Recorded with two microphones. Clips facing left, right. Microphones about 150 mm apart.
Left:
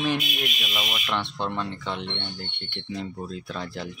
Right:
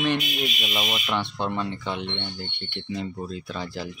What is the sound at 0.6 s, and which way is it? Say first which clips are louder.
Speech: right 3 dB; 20° right (ahead or behind).